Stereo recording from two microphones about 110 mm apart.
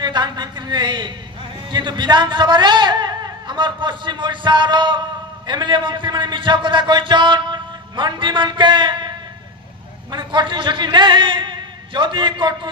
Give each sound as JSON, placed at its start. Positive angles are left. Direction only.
{"t": 0.0, "sound": "a man's voice", "side_deg": -40}
{"t": 10.1, "sound": "a man's voice", "side_deg": -45}